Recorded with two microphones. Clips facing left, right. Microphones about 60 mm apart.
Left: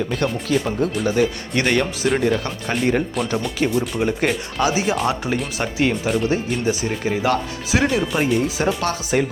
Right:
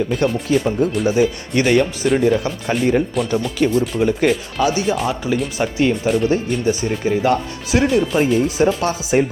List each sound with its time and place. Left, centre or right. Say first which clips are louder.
0.1 s speech: right 3 dB; centre
9.1 s speech: right 4 dB; centre